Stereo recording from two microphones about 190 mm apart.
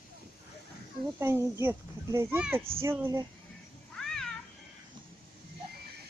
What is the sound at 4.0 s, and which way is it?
Cat, 5° left (ahead or behind).